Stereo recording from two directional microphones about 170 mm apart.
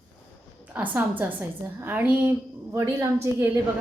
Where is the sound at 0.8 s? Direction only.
10° right (ahead or behind).